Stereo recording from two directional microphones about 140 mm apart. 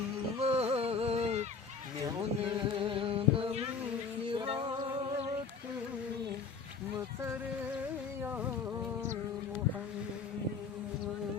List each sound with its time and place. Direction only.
0.3 s a sound: 45° right (ahead or behind)
4.3 s music: 35° right (ahead or behind)
8.2 s music: 15° right (ahead or behind)